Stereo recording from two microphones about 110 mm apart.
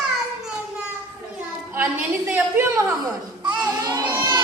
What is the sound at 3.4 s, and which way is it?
Baby cry, 40° right (ahead or behind).